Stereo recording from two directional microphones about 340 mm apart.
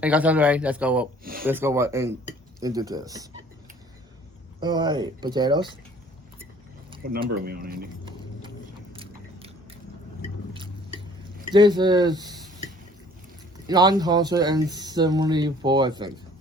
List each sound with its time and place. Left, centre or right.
0.0 s speech: centre
1.2 s speech: right
1.5 s speech: centre
4.6 s speech: centre
7.4 s speech: right
8.9 s biting: centre
10.5 s a sound: centre
11.5 s speech: centre
13.7 s speech: centre